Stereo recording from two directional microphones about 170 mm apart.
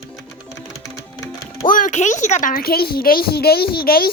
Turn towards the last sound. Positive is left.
turn(degrees=60)  # may be behind; listen again after turning